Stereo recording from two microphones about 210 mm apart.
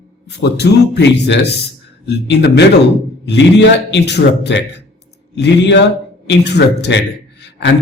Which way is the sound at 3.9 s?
55° left (ahead or behind).